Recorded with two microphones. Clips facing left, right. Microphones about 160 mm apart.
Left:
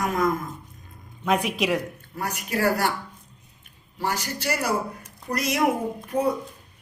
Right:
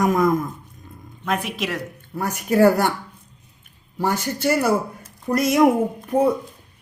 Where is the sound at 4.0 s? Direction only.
50° right (ahead or behind).